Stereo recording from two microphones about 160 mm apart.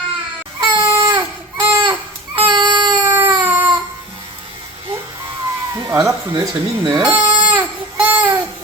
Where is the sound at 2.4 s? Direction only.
30° right (ahead or behind).